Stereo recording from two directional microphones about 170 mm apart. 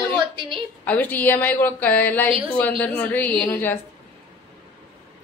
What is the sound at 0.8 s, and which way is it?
A woman's voice, 10° left (ahead or behind).